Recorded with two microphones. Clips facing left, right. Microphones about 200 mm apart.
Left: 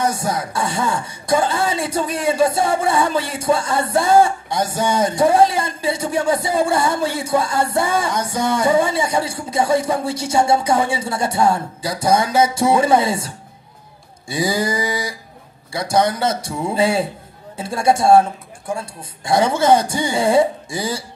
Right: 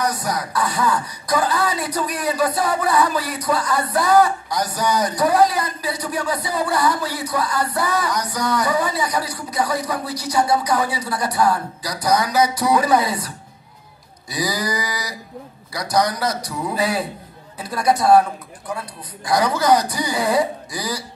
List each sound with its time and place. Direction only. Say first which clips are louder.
0.0 s speech: left 2 dB; 25° left (ahead or behind)
14.3 s speech: left 4 dB; 25° left (ahead or behind)